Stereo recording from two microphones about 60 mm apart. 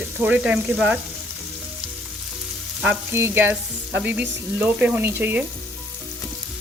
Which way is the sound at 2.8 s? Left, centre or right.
Right.